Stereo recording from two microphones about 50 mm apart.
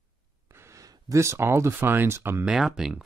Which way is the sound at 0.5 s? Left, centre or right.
Right.